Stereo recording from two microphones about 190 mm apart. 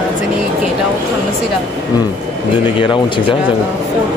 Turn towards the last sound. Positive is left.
turn(degrees=25)  # may be behind; listen again after turning